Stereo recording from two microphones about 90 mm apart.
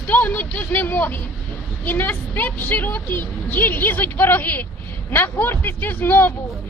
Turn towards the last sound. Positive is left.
turn(degrees=20)  # may be behind; listen again after turning